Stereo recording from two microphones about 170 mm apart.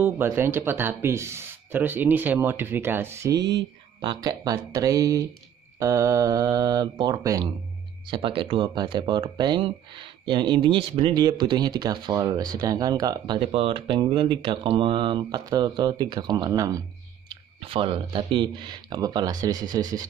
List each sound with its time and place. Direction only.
0.0 s speech: 15° right (ahead or behind)
13.4 s speech: 35° right (ahead or behind)
17.6 s speech: 30° right (ahead or behind)